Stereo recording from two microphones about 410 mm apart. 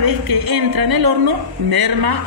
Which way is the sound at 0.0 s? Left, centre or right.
Right.